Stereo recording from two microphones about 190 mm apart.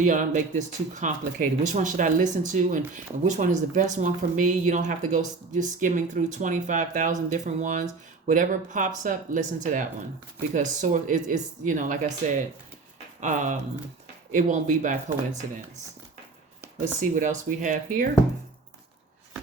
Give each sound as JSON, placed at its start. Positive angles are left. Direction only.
{"t": 0.0, "sound": "speech", "side_deg": -40}
{"t": 17.0, "sound": "speech", "side_deg": -40}